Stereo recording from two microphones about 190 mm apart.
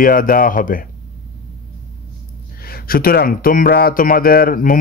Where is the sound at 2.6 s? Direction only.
50° left (ahead or behind).